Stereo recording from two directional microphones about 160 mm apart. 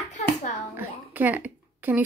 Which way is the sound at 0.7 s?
10° right (ahead or behind).